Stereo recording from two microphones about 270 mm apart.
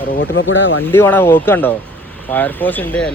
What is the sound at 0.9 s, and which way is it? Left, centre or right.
Speech, centre.